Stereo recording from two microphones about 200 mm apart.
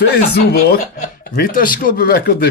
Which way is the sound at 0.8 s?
40° left (ahead or behind).